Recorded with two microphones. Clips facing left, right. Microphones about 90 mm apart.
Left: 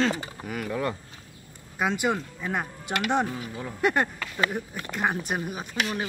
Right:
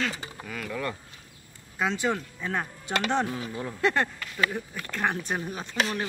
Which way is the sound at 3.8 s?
15° left (ahead or behind).